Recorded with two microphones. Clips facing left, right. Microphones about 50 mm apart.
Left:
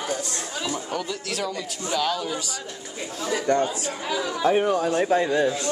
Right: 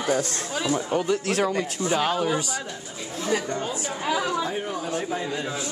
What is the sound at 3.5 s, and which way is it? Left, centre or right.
Speech, left.